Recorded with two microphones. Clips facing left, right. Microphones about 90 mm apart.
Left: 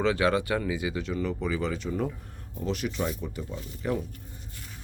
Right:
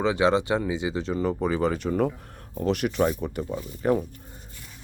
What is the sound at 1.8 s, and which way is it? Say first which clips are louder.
Speech: right 6 dB; 55° right (ahead or behind).